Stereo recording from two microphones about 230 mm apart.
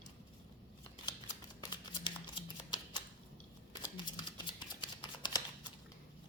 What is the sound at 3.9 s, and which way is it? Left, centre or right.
Shuffling cards, centre.